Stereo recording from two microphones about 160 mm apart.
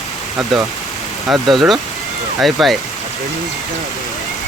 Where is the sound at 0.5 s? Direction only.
Centre (ahead or behind).